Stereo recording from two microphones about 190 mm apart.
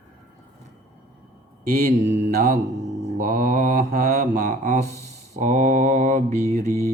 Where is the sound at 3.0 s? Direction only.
50° right (ahead or behind).